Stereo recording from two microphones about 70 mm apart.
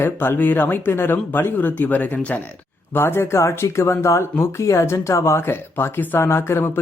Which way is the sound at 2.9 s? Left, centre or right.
Left.